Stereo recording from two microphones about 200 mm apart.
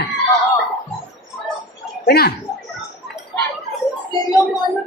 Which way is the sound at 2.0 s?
50° left (ahead or behind).